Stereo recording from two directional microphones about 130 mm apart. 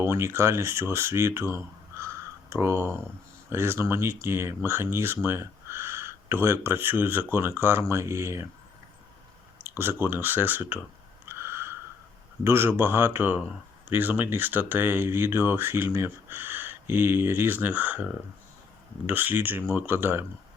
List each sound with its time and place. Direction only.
0.0 s speech: 20° right (ahead or behind)
2.0 s a sound: 20° right (ahead or behind)
3.5 s speech: 20° right (ahead or behind)
9.6 s speech: 15° right (ahead or behind)
11.3 s a sound: 20° right (ahead or behind)
12.5 s speech: 20° right (ahead or behind)